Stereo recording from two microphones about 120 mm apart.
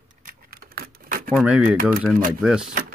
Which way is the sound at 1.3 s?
5° right (ahead or behind).